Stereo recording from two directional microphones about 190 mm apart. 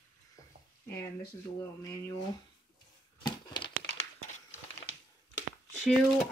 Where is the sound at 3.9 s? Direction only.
35° left (ahead or behind).